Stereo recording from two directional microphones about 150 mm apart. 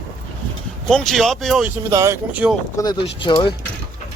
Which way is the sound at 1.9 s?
20° right (ahead or behind).